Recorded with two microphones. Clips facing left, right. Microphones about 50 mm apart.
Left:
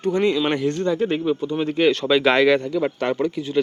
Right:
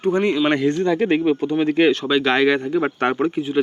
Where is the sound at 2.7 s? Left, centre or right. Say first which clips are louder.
Right 2 dB; right.